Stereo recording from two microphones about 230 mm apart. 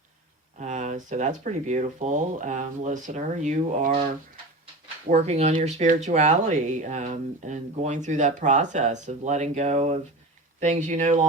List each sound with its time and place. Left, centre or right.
0.6 s speech: right
5.0 s speech: right